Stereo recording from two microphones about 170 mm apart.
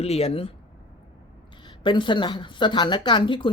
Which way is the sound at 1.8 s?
30° left (ahead or behind).